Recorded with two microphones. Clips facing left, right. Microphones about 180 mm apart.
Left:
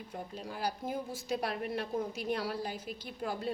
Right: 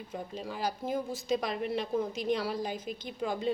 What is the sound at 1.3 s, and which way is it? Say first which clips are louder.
Speech: right 3 dB; 90° right.